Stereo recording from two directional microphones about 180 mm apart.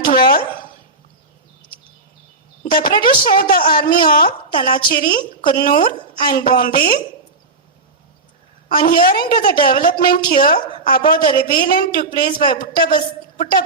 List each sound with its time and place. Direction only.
0.0 s a sound: 55° left (ahead or behind)
2.6 s a woman's voice: 55° left (ahead or behind)
8.7 s a woman's voice: 55° left (ahead or behind)